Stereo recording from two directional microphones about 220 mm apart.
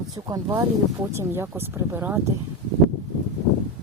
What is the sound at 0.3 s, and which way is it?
Speech, 15° right (ahead or behind).